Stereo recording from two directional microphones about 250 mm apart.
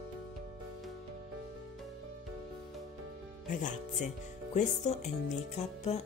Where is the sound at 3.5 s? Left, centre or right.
Left.